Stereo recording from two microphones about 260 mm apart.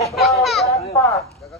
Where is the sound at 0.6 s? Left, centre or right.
Left.